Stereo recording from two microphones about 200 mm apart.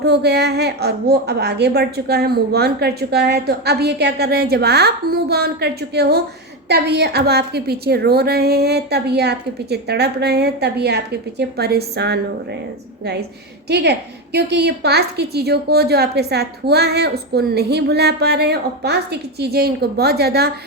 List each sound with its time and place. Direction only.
0.0 s a woman's voice: 55° right (ahead or behind)
13.7 s a woman's voice: 55° right (ahead or behind)